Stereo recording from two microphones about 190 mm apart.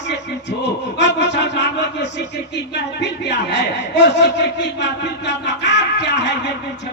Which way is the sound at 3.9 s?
65° left (ahead or behind).